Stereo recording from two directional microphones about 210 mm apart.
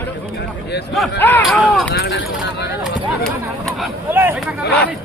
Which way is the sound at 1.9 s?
55° left (ahead or behind).